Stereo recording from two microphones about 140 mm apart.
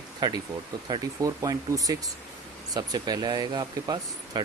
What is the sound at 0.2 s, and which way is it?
Speech, 30° right (ahead or behind).